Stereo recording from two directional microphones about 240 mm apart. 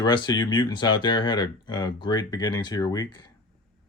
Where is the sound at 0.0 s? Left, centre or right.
Centre.